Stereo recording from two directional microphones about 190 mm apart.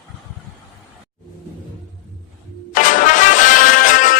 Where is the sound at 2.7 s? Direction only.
45° left (ahead or behind).